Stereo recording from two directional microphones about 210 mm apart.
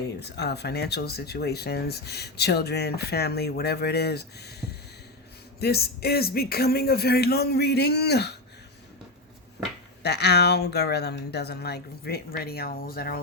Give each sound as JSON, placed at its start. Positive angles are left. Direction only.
{"t": 0.2, "sound": "speech", "side_deg": 50}
{"t": 10.0, "sound": "speech", "side_deg": 50}